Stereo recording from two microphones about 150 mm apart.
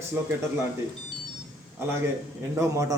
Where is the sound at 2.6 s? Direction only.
20° right (ahead or behind).